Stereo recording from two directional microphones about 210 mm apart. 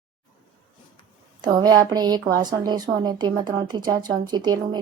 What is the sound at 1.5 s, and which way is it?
A woman's voice, 20° right (ahead or behind).